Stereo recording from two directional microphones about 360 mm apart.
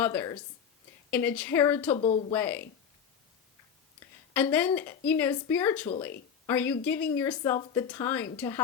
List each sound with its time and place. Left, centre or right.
0.0 s speech: centre
2.3 s speech: centre
4.4 s speech: centre